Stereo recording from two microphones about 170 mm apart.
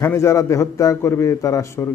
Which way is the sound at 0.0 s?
15° left (ahead or behind).